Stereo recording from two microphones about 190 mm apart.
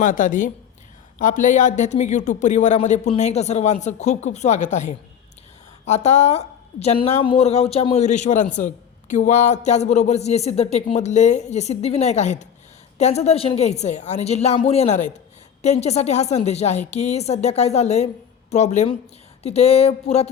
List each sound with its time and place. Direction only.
0.0 s a woman's voice: 45° left (ahead or behind)